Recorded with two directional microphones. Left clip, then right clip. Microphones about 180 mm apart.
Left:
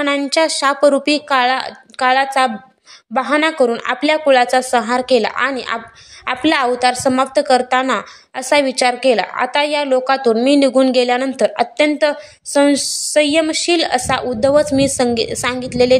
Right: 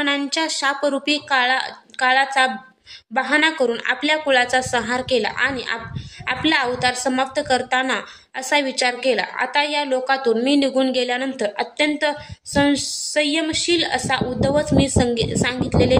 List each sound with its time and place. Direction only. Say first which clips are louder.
0.0 s a woman's voice: left 6 dB; 30° left (ahead or behind)